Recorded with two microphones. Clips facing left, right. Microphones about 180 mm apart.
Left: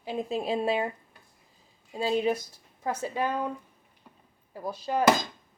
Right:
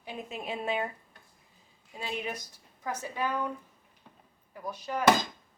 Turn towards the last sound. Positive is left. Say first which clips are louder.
# left 5 dB
turn(degrees=30)  # may be behind; listen again after turning